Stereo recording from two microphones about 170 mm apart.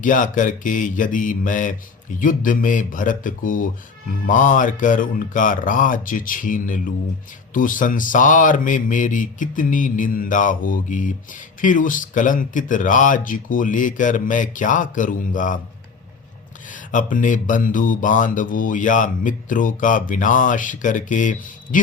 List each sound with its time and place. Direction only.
0.0 s speech: 50° left (ahead or behind)
16.6 s speech: 50° left (ahead or behind)